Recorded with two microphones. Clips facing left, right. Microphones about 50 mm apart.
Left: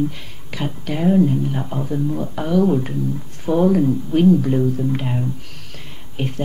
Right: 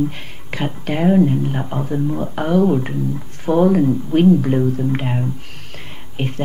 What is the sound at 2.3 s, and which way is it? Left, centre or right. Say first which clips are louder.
Speech: right 2 dB; right.